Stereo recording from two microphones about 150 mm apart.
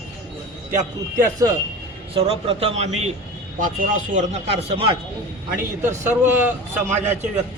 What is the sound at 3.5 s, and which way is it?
Speech, 60° right (ahead or behind).